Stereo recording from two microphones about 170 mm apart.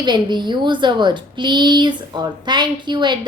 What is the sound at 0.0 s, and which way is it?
A woman's voice, 25° right (ahead or behind).